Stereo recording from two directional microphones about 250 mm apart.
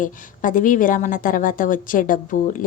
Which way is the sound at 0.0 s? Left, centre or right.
Left.